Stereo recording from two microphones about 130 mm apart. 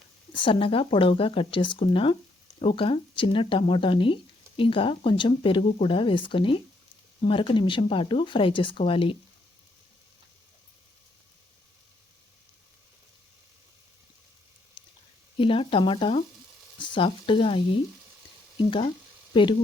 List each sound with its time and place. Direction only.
0.3 s speech: 40° left (ahead or behind)
14.8 s a sound: 35° left (ahead or behind)
15.4 s speech: 40° left (ahead or behind)
19.3 s speech: 40° left (ahead or behind)